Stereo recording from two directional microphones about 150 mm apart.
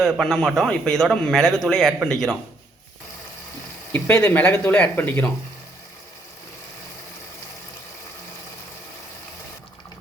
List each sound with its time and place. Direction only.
0.0 s a man's voice: centre (ahead or behind)
3.9 s speech: 15° left (ahead or behind)